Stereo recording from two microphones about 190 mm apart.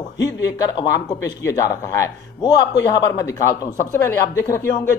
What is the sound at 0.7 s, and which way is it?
Speech, 15° left (ahead or behind).